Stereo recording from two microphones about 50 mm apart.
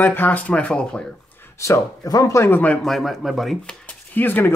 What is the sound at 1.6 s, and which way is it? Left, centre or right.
Speech, left.